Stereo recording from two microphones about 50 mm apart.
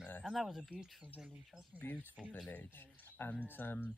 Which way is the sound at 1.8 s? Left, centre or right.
Left.